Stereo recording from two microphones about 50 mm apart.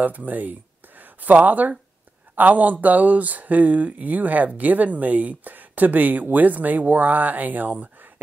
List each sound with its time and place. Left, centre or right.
0.0 s speech: right